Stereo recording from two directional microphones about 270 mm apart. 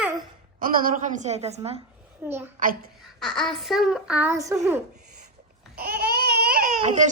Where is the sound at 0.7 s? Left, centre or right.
Right.